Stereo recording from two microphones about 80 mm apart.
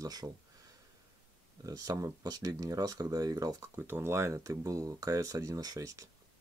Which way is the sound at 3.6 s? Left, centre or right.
Right.